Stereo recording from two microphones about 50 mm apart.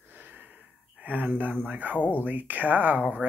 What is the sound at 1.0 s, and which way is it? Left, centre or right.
Speech, right.